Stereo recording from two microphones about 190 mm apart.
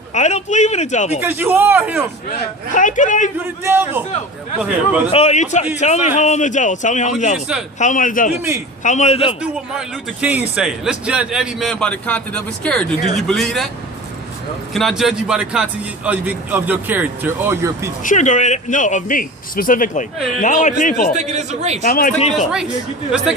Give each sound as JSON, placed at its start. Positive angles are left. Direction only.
{"t": 0.1, "sound": "speech", "side_deg": 35}
{"t": 1.2, "sound": "speech", "side_deg": -10}
{"t": 2.7, "sound": "speech", "side_deg": 40}
{"t": 3.6, "sound": "speech", "side_deg": -10}
{"t": 5.1, "sound": "a man's voice", "side_deg": 35}
{"t": 9.4, "sound": "a man's voice", "side_deg": -5}
{"t": 14.7, "sound": "speech", "side_deg": 0}
{"t": 18.0, "sound": "speech", "side_deg": 40}
{"t": 21.2, "sound": "speech", "side_deg": -35}
{"t": 21.8, "sound": "a man's voice", "side_deg": 50}
{"t": 22.2, "sound": "speech", "side_deg": 35}